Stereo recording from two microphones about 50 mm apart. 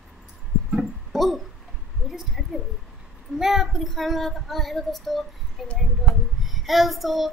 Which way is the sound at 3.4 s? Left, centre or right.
Centre.